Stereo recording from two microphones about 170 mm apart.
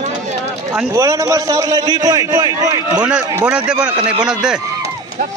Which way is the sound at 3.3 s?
5° right (ahead or behind).